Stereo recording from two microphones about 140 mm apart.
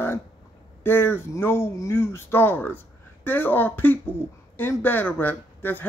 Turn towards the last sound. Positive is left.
turn(degrees=15)  # may be behind; listen again after turning